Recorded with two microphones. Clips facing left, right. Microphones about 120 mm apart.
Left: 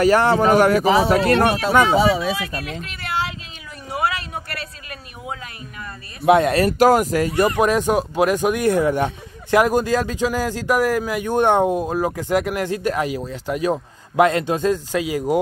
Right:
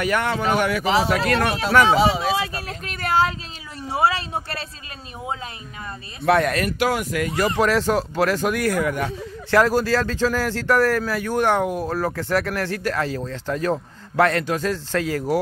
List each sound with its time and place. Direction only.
0.0 s speech: 35° left (ahead or behind)
2.3 s speech: 30° right (ahead or behind)
3.9 s a sound: 30° right (ahead or behind)
6.2 s speech: 20° left (ahead or behind)
6.5 s speech: 35° left (ahead or behind)
9.5 s speech: 15° left (ahead or behind)